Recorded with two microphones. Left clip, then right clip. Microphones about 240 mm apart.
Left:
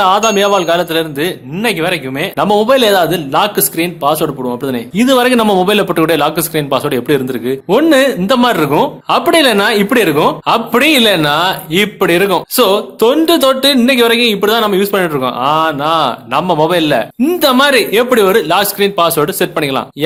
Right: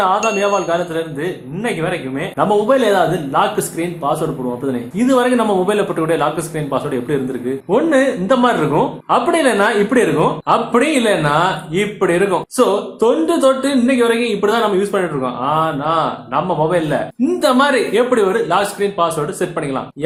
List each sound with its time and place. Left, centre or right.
0.0 s speech: left